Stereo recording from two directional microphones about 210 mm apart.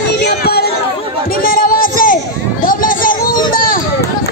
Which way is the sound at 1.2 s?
45° left (ahead or behind).